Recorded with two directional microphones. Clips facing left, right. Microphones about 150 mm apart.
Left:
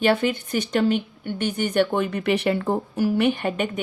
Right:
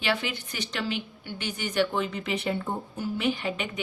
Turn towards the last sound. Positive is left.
turn(degrees=50)  # may be behind; listen again after turning